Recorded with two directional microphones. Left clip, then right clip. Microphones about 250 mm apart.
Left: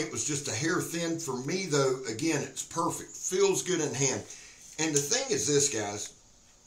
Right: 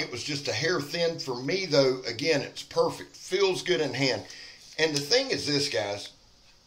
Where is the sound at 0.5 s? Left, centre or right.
Right.